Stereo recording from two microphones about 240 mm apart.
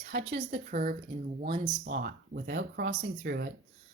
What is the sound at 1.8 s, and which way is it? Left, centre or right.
Speech, right.